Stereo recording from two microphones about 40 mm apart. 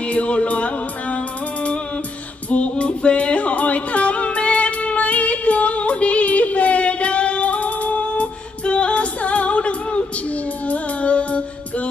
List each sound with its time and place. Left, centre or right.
0.0 s music: left